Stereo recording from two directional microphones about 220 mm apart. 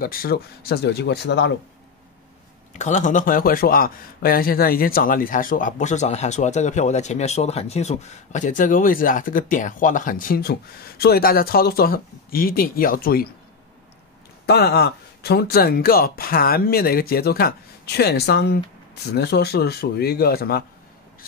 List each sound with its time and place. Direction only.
0.0 s speech: 40° left (ahead or behind)
2.8 s speech: 35° left (ahead or behind)
14.4 s speech: 45° left (ahead or behind)